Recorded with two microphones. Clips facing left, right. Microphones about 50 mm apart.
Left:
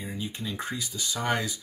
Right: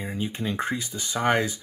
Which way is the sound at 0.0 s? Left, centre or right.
Right.